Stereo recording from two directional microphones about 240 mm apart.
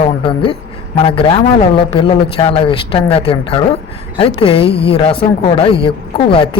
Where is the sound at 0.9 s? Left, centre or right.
Left.